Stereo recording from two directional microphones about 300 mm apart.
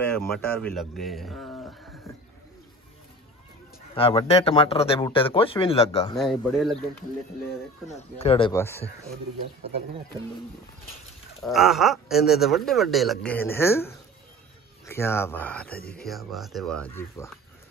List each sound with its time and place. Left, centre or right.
0.0 s a man's voice: centre
3.9 s speech: centre
6.1 s speech: centre
7.9 s speech: centre
11.4 s speech: centre